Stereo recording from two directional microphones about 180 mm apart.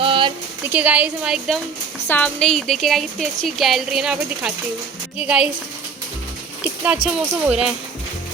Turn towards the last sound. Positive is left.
turn(degrees=-5)  # may be behind; listen again after turning